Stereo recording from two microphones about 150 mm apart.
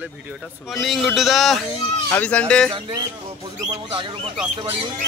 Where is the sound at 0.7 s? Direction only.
Centre (ahead or behind).